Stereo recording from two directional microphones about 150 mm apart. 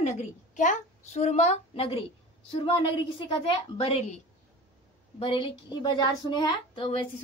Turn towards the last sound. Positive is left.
turn(degrees=35)  # may be behind; listen again after turning